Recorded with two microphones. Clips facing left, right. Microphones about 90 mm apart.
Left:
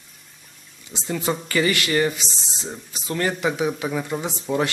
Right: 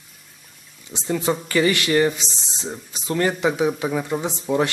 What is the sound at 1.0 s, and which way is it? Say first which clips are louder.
A man's voice: right 3 dB; 5° right (ahead or behind).